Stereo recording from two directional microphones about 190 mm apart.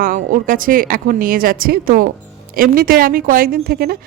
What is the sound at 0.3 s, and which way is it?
Speech, 45° right (ahead or behind).